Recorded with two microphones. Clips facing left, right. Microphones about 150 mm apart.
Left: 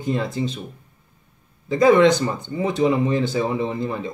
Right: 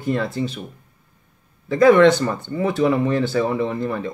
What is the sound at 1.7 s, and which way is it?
Speech, 15° left (ahead or behind).